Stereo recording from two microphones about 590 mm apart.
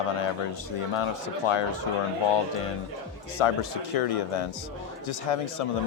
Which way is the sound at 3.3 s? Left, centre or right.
Left.